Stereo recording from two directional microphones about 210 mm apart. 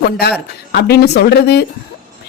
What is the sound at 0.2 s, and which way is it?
Speech, 50° left (ahead or behind).